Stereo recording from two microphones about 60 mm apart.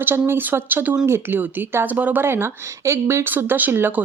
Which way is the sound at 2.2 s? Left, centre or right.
Right.